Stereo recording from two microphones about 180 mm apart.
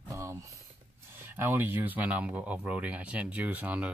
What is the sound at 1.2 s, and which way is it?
Speech, 10° right (ahead or behind).